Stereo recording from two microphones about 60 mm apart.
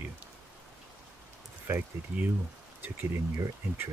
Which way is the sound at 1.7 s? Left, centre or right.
Right.